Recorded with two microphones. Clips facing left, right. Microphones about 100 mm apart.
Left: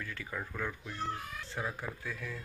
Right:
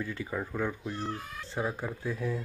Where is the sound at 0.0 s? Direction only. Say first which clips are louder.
Right 6 dB; 20° right (ahead or behind).